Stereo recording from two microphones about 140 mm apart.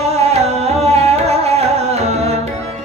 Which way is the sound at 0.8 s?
50° right (ahead or behind).